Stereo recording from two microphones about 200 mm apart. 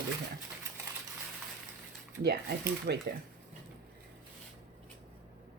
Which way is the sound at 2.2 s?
50° right (ahead or behind).